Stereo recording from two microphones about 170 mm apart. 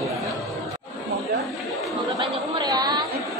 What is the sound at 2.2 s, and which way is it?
Chatter, 25° right (ahead or behind).